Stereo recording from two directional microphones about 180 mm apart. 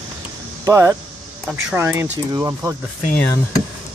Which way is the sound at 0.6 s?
15° right (ahead or behind).